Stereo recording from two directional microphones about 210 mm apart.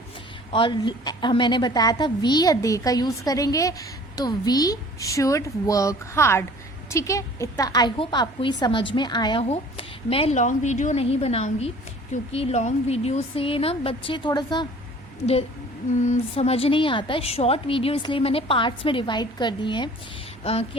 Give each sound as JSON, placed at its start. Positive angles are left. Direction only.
{"t": 0.5, "sound": "a woman's voice", "side_deg": 25}
{"t": 15.9, "sound": "a woman's voice", "side_deg": 35}
{"t": 20.4, "sound": "a sound", "side_deg": 30}